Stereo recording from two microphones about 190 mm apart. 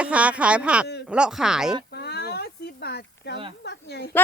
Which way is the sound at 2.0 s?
60° left (ahead or behind).